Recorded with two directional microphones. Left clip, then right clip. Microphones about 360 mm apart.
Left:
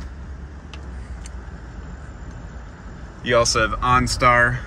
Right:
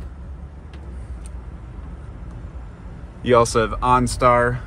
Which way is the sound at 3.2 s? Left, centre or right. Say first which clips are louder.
Right 2 dB; centre.